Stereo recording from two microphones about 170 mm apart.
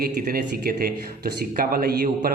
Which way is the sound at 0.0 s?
60° right (ahead or behind).